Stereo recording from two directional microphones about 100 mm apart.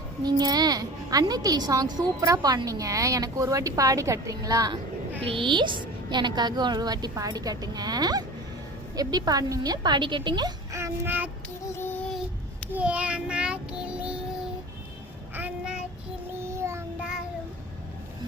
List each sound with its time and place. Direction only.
0.2 s a woman's voice: 45° right (ahead or behind)
5.2 s a woman's voice: 60° right (ahead or behind)
10.7 s child singing: 30° right (ahead or behind)
11.6 s child singing: 20° left (ahead or behind)
12.7 s child singing: 15° right (ahead or behind)
15.4 s child singing: 10° right (ahead or behind)
16.4 s child singing: 25° right (ahead or behind)